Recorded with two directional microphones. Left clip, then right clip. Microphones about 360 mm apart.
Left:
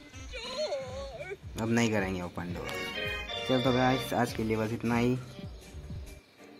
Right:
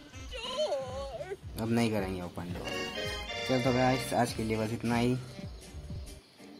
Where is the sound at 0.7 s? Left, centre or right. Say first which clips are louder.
Right 1 dB; right.